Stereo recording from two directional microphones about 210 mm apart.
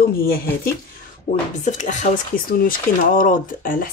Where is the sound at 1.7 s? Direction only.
35° left (ahead or behind).